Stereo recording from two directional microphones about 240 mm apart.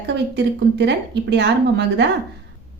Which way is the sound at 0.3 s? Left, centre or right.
Right.